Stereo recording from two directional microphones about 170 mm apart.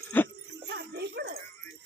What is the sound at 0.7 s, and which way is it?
Speech, 70° right (ahead or behind).